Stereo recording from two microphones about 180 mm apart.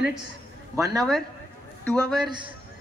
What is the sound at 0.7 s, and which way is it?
Speech, 20° right (ahead or behind).